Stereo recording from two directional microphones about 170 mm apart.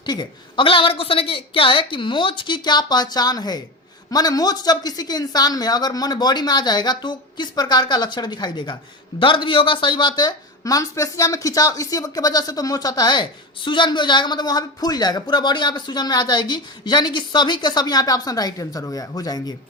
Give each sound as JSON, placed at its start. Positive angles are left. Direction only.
{"t": 0.0, "sound": "speech", "side_deg": 25}